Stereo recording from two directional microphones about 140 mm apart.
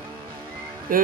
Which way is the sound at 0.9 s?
90° right.